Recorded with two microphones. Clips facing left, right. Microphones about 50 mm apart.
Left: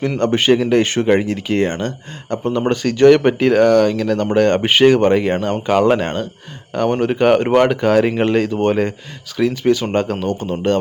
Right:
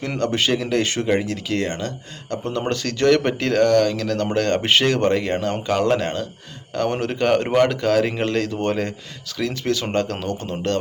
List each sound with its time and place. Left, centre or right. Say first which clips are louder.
0.2 s speech: left 6 dB; left